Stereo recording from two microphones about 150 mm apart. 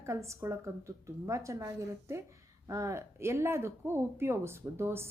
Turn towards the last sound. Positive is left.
turn(degrees=-15)  # may be behind; listen again after turning